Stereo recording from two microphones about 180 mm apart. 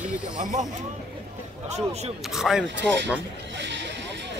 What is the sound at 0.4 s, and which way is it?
Speech, 45° right (ahead or behind).